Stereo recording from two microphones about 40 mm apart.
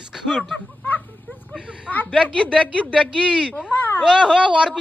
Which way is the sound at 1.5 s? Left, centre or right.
Right.